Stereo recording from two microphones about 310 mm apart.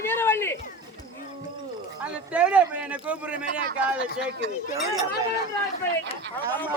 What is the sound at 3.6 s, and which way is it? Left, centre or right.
Speech, right.